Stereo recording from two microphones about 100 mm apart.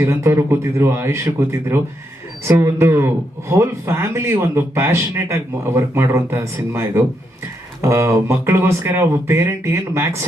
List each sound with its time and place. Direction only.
0.0 s a man's voice: 30° right (ahead or behind)